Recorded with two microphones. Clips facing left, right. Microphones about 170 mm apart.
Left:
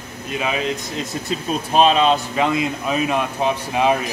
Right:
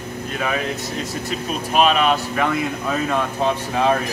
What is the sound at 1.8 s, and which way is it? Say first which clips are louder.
Speech: left 2 dB; 30° left (ahead or behind).